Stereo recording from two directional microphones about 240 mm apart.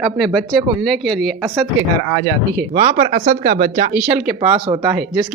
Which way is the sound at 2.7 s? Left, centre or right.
Right.